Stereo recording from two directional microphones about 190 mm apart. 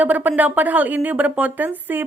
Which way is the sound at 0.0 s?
10° right (ahead or behind).